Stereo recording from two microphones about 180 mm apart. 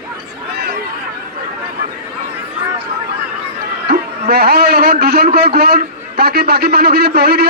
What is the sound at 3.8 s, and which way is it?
A man's voice, 60° right (ahead or behind).